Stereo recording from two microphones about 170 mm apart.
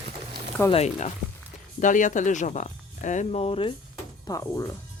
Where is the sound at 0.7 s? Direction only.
40° left (ahead or behind).